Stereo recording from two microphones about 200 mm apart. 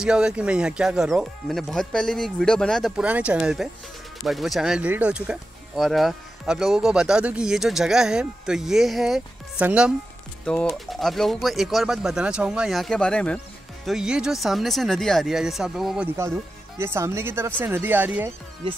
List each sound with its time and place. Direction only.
0.0 s speech: 5° right (ahead or behind)
16.2 s speech: 10° right (ahead or behind)
18.6 s speech: 25° right (ahead or behind)